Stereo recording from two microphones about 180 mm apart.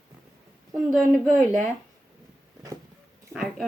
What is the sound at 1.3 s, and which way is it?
Speech, 45° right (ahead or behind).